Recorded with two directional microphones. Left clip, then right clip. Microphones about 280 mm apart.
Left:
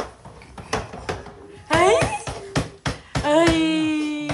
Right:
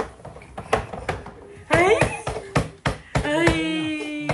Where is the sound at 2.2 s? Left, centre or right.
Right.